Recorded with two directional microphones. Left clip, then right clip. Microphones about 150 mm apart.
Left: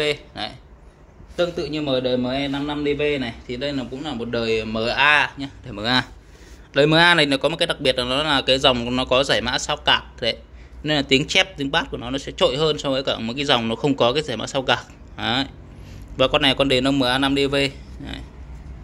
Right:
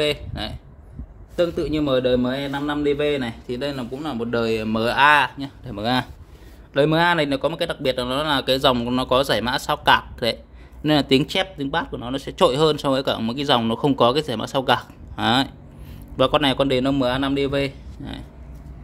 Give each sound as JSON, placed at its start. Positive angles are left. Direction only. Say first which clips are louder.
{"t": 0.0, "sound": "speech", "louder": "even", "side_deg": -35}
{"t": 1.3, "sound": "a man's voice", "louder": "right 1 dB", "side_deg": -50}
{"t": 5.7, "sound": "a man's voice", "louder": "left 2 dB", "side_deg": -15}
{"t": 11.3, "sound": "speech", "louder": "left 4 dB", "side_deg": -15}
{"t": 12.4, "sound": "speech", "louder": "right 2 dB", "side_deg": -40}
{"t": 16.2, "sound": "a man's voice", "louder": "left 1 dB", "side_deg": -25}